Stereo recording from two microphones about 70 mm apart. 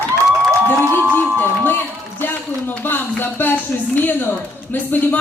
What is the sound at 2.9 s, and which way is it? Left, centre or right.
Speech, left.